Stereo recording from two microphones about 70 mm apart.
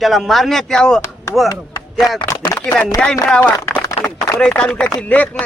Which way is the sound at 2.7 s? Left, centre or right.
Centre.